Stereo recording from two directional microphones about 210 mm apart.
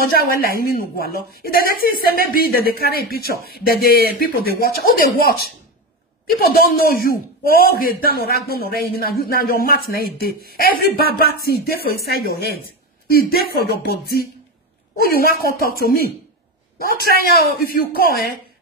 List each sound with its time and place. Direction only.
0.0 s a man's voice: 45° left (ahead or behind)